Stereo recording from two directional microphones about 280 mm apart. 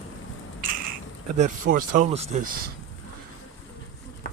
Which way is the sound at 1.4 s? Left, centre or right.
Right.